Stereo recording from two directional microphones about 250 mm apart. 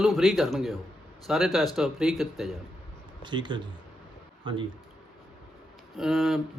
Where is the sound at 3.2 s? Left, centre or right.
Centre.